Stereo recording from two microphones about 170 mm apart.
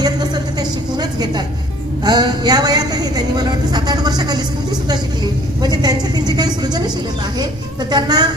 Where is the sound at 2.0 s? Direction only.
25° right (ahead or behind).